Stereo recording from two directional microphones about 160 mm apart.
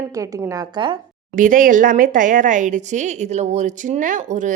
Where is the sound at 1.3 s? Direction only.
55° right (ahead or behind).